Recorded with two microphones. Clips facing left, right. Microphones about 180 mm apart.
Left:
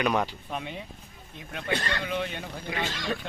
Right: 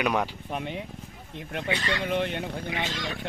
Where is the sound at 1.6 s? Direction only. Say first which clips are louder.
Left 1 dB; 50° left (ahead or behind).